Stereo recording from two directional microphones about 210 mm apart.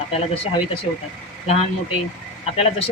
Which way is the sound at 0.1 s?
25° left (ahead or behind).